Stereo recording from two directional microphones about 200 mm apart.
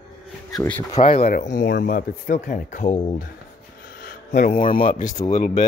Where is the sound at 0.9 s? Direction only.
30° left (ahead or behind).